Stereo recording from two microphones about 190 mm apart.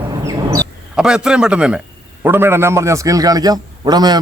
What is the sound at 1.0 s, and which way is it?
A man's voice, 5° right (ahead or behind).